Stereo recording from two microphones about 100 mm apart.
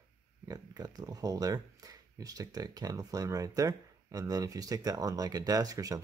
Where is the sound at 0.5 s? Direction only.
40° right (ahead or behind).